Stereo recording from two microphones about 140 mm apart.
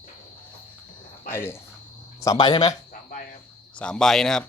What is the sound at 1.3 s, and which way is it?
Speech, 15° left (ahead or behind).